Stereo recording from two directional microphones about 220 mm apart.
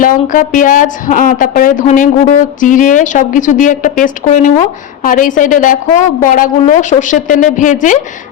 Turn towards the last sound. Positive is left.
turn(degrees=35)  # may be behind; listen again after turning